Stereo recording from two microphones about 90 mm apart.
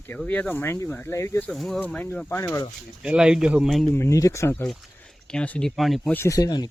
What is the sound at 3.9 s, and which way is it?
Speech, 30° left (ahead or behind).